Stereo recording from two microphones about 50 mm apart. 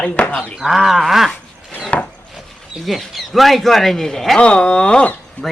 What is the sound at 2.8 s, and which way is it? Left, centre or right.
A man's voice, centre.